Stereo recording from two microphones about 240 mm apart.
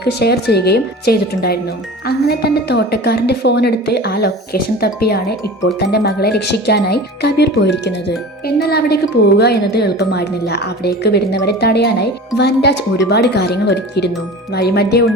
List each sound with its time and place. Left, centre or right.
0.0 s speech: left